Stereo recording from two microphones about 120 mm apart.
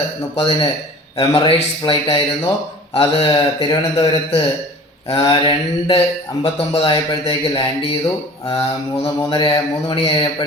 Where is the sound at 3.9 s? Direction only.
55° left (ahead or behind).